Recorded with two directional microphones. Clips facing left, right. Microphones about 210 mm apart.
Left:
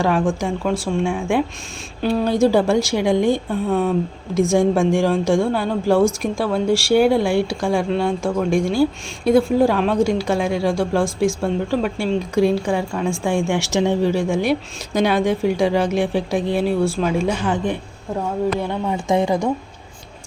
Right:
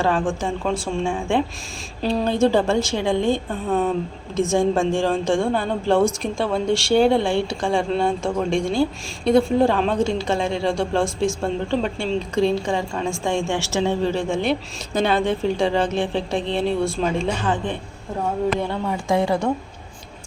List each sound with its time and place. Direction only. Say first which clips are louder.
0.0 s a woman's voice: left 2 dB; 10° left (ahead or behind)